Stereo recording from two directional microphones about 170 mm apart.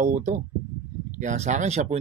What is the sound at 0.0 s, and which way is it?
Speech, 45° right (ahead or behind).